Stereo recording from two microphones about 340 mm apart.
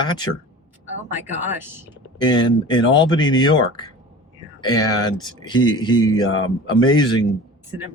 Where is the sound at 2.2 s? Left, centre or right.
Centre.